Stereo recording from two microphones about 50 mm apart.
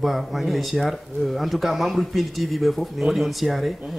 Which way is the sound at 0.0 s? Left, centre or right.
Centre.